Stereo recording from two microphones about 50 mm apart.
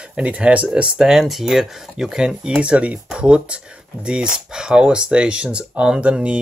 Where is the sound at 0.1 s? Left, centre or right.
Right.